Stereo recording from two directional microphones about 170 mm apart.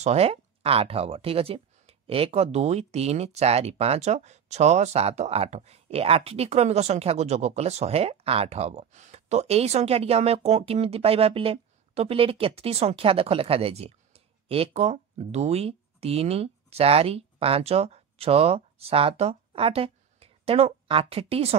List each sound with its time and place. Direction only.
0.0 s speech: 40° right (ahead or behind)